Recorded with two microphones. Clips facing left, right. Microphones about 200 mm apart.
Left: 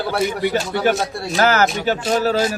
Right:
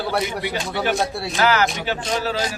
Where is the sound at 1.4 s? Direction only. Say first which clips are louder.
Left 3 dB; 45° left (ahead or behind).